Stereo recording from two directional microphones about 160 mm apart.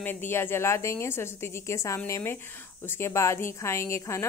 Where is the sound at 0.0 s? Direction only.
15° left (ahead or behind).